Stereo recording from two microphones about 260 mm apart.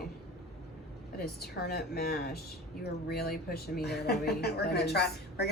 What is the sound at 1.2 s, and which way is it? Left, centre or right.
A woman's voice, left.